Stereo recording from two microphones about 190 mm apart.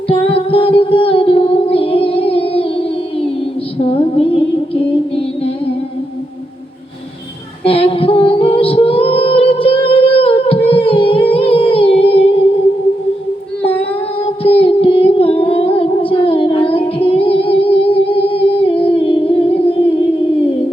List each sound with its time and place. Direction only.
0.1 s music: 30° left (ahead or behind)
7.6 s female singing: 30° left (ahead or behind)
13.6 s child singing: 30° left (ahead or behind)
14.4 s music: 30° left (ahead or behind)